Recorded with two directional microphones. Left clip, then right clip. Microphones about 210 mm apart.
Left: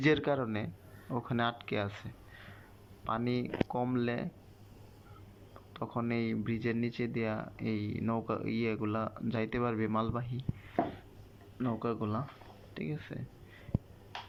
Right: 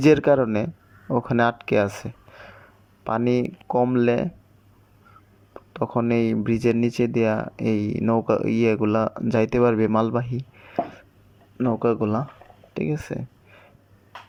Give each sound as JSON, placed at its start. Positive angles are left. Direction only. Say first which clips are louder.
{"t": 0.0, "sound": "a man's voice", "louder": "right 13 dB", "side_deg": -55}
{"t": 5.7, "sound": "a man's voice", "louder": "right 13 dB", "side_deg": -55}